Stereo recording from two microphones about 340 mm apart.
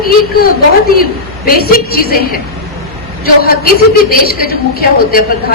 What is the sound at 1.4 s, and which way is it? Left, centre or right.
Speech, left.